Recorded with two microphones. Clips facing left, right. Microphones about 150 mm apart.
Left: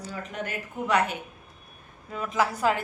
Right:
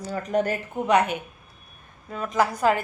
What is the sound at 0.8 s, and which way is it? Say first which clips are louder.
Speech: right 4 dB; 20° right (ahead or behind).